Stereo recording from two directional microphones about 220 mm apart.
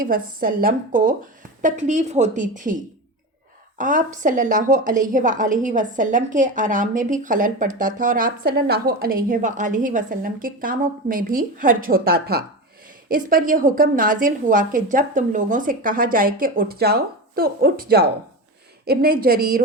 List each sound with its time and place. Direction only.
0.0 s a woman's voice: 40° right (ahead or behind)